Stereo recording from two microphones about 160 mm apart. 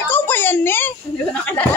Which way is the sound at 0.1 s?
15° left (ahead or behind).